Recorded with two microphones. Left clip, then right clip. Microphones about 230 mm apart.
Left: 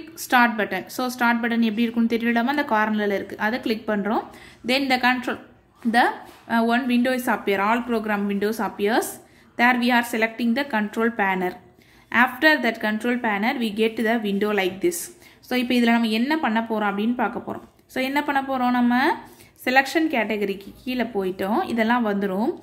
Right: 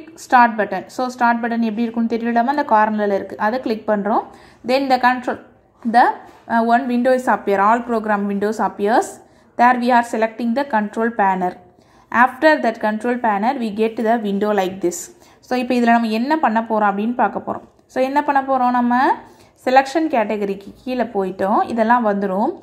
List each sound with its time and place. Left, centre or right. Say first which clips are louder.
0.3 s a woman's voice: right 6 dB; centre